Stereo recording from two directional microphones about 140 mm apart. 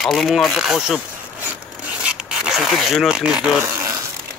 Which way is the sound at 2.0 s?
5° right (ahead or behind).